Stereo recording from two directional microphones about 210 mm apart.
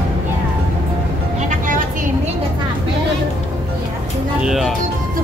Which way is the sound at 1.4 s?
40° right (ahead or behind).